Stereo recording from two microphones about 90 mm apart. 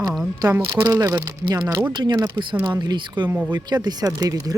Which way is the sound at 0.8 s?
45° right (ahead or behind).